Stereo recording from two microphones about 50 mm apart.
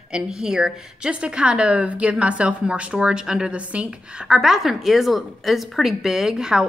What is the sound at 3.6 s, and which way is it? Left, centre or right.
Speech, right.